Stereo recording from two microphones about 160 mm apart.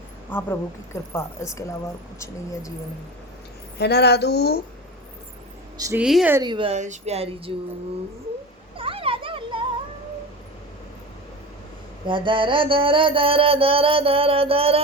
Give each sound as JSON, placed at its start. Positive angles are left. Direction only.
{"t": 0.3, "sound": "speech", "side_deg": 15}
{"t": 3.8, "sound": "a woman's voice", "side_deg": 90}
{"t": 5.7, "sound": "speech", "side_deg": -20}
{"t": 6.0, "sound": "speech", "side_deg": -5}
{"t": 6.4, "sound": "music", "side_deg": -30}
{"t": 6.7, "sound": "music", "side_deg": -45}
{"t": 8.8, "sound": "a sound", "side_deg": -35}
{"t": 12.0, "sound": "music", "side_deg": -30}